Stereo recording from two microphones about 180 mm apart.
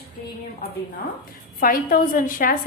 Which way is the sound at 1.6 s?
50° left (ahead or behind).